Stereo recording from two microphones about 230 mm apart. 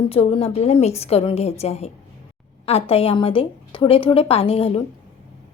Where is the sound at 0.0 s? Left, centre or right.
Left.